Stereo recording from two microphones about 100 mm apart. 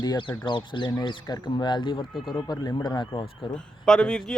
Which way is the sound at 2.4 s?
45° left (ahead or behind).